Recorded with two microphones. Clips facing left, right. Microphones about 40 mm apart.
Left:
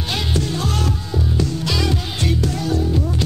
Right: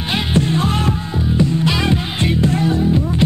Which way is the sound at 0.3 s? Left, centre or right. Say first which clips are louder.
Right 8 dB; right.